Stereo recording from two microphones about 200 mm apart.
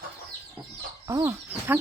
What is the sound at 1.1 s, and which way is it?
Speech, 15° right (ahead or behind).